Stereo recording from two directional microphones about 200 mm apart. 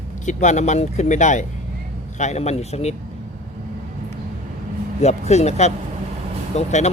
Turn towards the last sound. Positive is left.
turn(degrees=35)  # may be behind; listen again after turning